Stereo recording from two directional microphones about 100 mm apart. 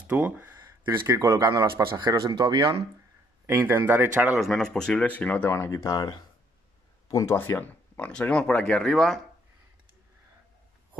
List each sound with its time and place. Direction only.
0.0 s speech: 15° right (ahead or behind); by 1.7 s 40° right (ahead or behind)
2.0 s speech: 50° right (ahead or behind)
3.4 s speech: 20° right (ahead or behind)
4.4 s speech: 5° left (ahead or behind)
5.5 s speech: 30° left (ahead or behind)
7.3 s speech: 20° left (ahead or behind); by 9.2 s 5° left (ahead or behind)